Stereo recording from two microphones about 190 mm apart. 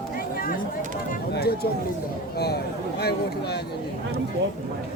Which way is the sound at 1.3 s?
55° left (ahead or behind).